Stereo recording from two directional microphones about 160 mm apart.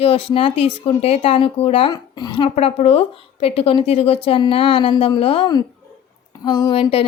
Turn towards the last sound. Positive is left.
turn(degrees=35)  # may be behind; listen again after turning